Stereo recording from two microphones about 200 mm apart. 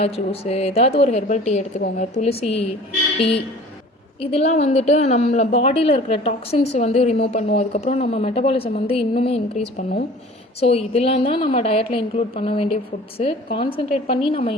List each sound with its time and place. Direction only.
0.0 s speech: 30° left (ahead or behind)
4.2 s a woman's voice: 30° left (ahead or behind)